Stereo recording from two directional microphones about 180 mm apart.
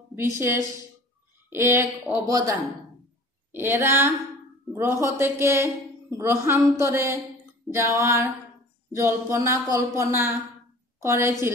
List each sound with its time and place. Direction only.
0.1 s a woman's voice: 15° right (ahead or behind)